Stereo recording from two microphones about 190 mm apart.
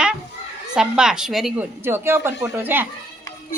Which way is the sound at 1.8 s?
10° right (ahead or behind).